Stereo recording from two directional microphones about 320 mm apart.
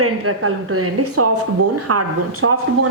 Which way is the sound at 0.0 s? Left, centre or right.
Right.